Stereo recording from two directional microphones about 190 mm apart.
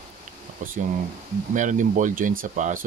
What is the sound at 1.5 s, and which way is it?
Speech, 40° right (ahead or behind).